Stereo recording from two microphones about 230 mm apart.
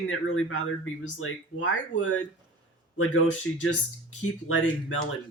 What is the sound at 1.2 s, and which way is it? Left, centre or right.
Speech, left.